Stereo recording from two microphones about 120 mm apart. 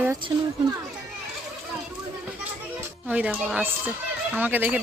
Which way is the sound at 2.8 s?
15° right (ahead or behind).